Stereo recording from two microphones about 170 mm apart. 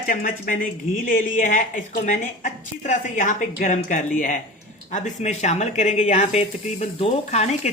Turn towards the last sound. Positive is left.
turn(degrees=40)  # may be behind; listen again after turning